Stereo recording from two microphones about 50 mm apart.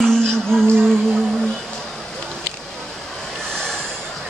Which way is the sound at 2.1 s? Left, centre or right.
Centre.